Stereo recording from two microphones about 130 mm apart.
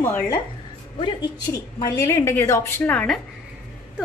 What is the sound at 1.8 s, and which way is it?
A woman's voice, 25° left (ahead or behind).